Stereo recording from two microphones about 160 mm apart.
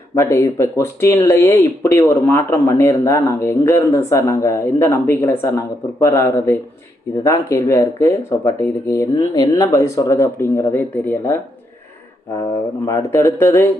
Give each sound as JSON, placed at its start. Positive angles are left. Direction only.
{"t": 0.2, "sound": "speech", "side_deg": 15}
{"t": 12.8, "sound": "speech", "side_deg": 15}